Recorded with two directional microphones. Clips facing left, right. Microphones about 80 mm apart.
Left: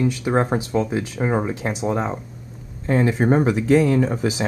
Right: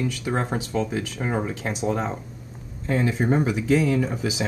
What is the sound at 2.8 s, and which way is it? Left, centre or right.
Speech, left.